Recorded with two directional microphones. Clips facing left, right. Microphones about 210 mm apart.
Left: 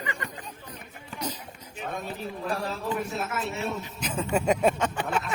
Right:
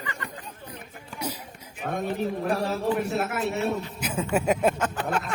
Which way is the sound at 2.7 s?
65° right (ahead or behind).